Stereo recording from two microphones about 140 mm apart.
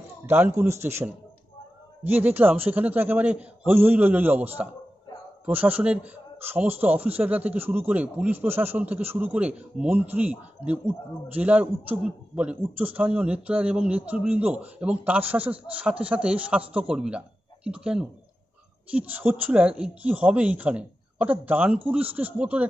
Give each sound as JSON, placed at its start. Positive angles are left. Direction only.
{"t": 0.3, "sound": "speech", "side_deg": -15}